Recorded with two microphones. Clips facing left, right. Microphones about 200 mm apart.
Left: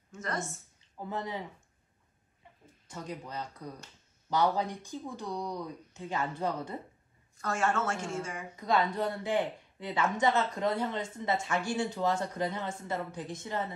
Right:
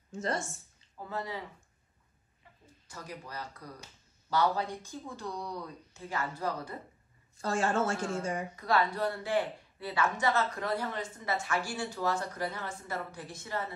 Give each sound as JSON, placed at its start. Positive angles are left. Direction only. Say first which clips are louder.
{"t": 0.1, "sound": "a woman's voice", "louder": "right 2 dB", "side_deg": -30}
{"t": 1.0, "sound": "speech", "louder": "left 1 dB", "side_deg": 20}
{"t": 2.9, "sound": "speech", "louder": "left 4 dB", "side_deg": 20}
{"t": 7.3, "sound": "a woman's voice", "louder": "right 1 dB", "side_deg": -30}
{"t": 8.5, "sound": "speech", "louder": "left 2 dB", "side_deg": 20}